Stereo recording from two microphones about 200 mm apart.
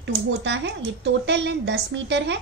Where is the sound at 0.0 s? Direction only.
60° right (ahead or behind).